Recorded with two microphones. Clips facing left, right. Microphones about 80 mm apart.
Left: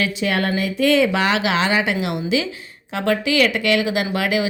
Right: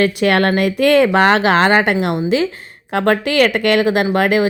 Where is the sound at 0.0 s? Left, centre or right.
Right.